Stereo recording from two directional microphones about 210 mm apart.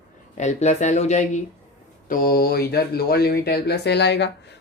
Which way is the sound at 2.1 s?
45° left (ahead or behind).